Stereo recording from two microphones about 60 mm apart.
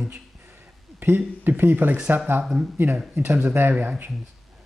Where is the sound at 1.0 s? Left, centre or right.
Right.